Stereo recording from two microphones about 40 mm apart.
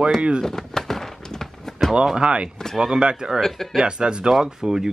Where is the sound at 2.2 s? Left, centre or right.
Right.